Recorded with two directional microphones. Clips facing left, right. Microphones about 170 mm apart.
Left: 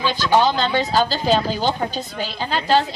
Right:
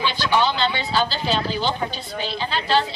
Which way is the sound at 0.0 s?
45° left (ahead or behind).